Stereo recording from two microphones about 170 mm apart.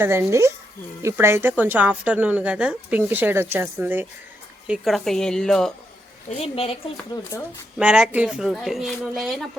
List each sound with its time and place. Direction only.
0.0 s speech: 15° right (ahead or behind); by 5.7 s 5° left (ahead or behind)
6.3 s speech: 35° left (ahead or behind)
7.8 s speech: 5° right (ahead or behind)